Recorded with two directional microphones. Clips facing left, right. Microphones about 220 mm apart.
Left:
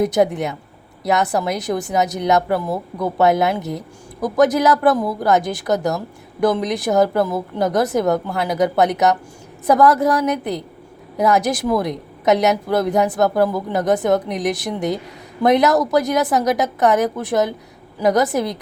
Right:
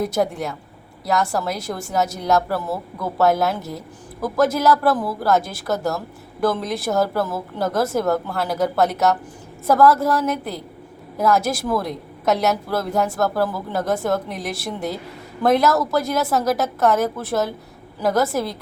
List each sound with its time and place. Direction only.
0.0 s a woman's voice: 20° left (ahead or behind)